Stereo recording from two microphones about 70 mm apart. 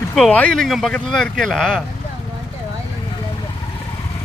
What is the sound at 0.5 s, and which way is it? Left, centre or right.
Speech, centre.